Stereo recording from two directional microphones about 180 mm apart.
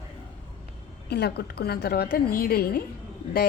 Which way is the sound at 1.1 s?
65° left (ahead or behind).